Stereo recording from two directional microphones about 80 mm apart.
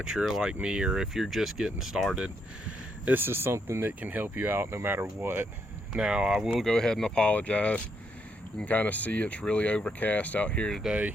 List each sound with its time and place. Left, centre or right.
0.0 s speech: centre
3.1 s speech: right
6.0 s speech: centre
6.7 s speech: centre